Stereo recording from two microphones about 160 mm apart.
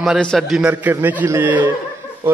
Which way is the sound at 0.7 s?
10° right (ahead or behind).